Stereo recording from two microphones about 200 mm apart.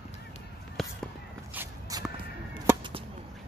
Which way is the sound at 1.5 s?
15° right (ahead or behind).